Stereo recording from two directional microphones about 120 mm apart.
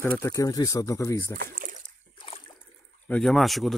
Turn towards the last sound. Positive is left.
turn(degrees=0)  # may be behind; listen again after turning